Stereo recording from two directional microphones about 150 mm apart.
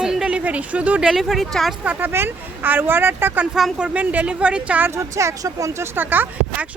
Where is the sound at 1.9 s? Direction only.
15° right (ahead or behind).